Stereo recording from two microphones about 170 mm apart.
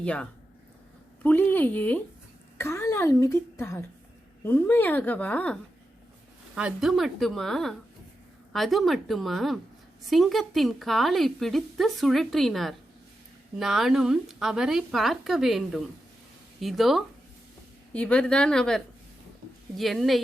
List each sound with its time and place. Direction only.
0.0 s a woman's voice: 5° left (ahead or behind)
6.6 s a woman's voice: 5° right (ahead or behind)